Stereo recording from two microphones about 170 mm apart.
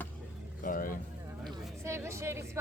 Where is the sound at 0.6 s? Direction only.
55° left (ahead or behind).